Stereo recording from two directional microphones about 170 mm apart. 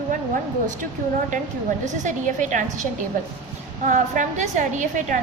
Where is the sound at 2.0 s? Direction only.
45° right (ahead or behind).